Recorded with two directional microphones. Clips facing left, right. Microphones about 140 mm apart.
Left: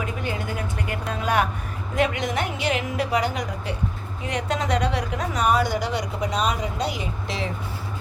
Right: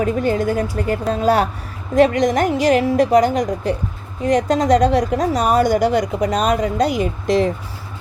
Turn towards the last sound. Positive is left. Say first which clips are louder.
# right 12 dB
turn(degrees=-45)  # may be behind; listen again after turning